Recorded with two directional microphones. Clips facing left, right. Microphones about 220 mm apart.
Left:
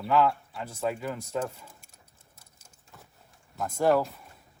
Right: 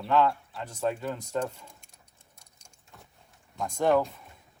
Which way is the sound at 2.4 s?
5° left (ahead or behind).